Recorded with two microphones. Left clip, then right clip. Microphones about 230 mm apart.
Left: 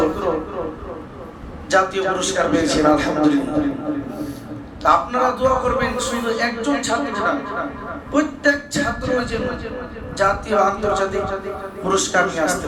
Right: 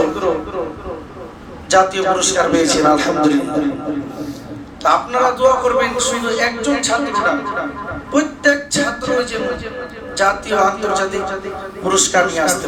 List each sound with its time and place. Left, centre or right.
1.7 s a man's voice: right
4.8 s a man's voice: right